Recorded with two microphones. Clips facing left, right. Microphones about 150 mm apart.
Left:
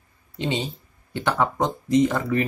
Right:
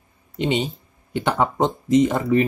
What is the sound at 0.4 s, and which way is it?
Speech, 20° right (ahead or behind).